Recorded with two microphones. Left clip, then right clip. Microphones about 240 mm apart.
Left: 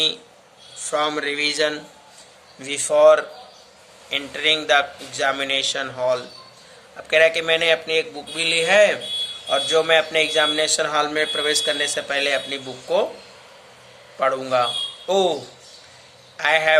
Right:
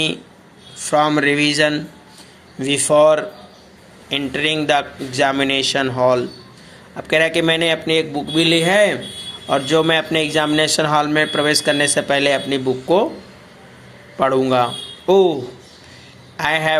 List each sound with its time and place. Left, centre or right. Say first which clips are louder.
0.8 s a man's voice: right 7 dB; right
14.2 s a man's voice: right 4 dB; centre
16.4 s a man's voice: even; right